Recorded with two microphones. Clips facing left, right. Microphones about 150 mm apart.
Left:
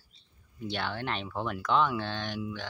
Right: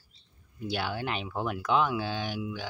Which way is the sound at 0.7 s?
5° right (ahead or behind).